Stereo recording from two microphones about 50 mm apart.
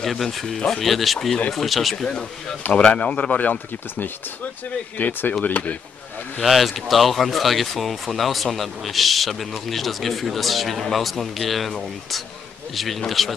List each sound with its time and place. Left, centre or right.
0.0 s speech: centre
2.7 s speech: left
4.9 s speech: left
6.4 s speech: centre